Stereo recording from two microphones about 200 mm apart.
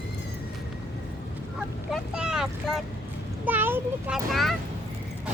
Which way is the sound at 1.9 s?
5° right (ahead or behind).